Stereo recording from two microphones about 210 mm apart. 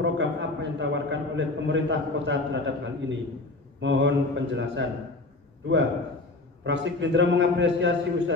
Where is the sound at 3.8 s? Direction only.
60° right (ahead or behind).